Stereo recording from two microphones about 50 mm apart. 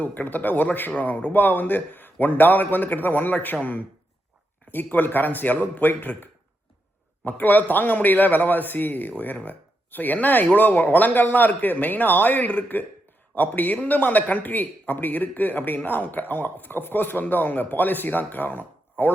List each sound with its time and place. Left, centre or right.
0.0 s a man's voice: left
7.3 s a man's voice: left